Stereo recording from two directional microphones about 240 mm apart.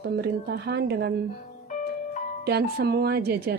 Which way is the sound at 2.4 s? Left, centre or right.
Right.